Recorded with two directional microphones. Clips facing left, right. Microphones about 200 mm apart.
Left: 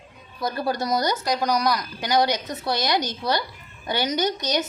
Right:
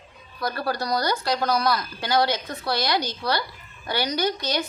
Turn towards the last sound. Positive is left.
turn(degrees=20)  # may be behind; listen again after turning